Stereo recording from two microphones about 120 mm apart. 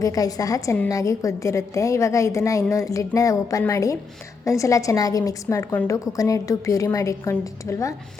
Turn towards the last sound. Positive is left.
turn(degrees=25)  # may be behind; listen again after turning